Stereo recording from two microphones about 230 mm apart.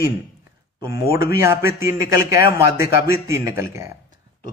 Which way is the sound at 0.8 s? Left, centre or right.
Centre.